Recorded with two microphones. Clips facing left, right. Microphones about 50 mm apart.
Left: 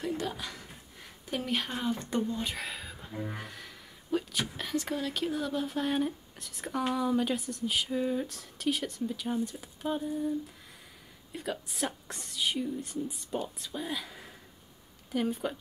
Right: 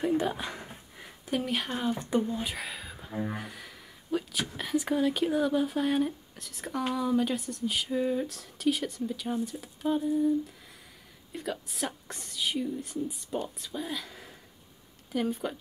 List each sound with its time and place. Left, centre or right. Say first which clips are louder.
0.0 s speech: right 6 dB; centre
1.3 s speech: right 2 dB; centre
3.1 s speech: right 5 dB; centre
3.3 s speech: right 2 dB; centre
11.3 s speech: right 1 dB; centre